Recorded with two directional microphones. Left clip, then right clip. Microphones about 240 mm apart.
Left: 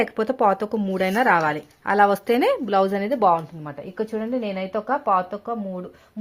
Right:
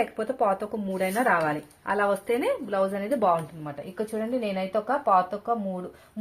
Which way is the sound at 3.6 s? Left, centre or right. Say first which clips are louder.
Left 4 dB; left.